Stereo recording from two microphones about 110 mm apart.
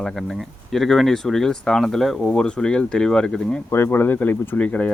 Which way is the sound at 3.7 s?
20° left (ahead or behind).